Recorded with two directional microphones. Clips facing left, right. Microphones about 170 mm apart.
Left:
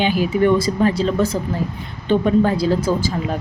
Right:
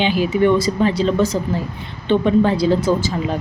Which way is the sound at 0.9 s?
35° right (ahead or behind).